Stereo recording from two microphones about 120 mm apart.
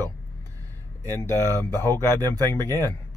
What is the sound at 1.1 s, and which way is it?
Speech, 20° left (ahead or behind).